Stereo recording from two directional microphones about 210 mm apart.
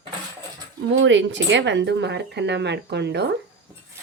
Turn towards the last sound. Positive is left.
turn(degrees=-55)  # may be behind; listen again after turning